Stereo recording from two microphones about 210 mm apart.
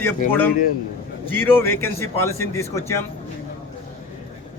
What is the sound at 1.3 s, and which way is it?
A man's voice, 10° left (ahead or behind).